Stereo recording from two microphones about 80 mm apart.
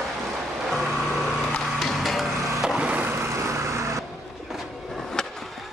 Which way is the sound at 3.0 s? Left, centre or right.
Right.